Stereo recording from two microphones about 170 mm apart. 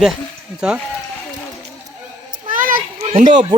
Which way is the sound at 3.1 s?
45° right (ahead or behind).